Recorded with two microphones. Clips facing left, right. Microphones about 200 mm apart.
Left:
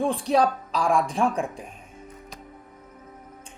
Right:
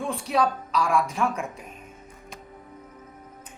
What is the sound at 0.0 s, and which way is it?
Speech, 35° left (ahead or behind).